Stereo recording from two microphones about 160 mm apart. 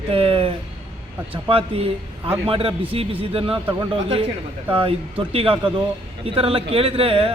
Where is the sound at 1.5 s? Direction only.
35° right (ahead or behind).